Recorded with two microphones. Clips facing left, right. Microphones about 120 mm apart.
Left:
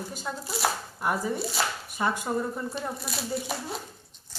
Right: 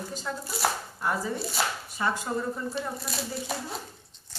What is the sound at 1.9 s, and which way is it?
Speech, 15° left (ahead or behind).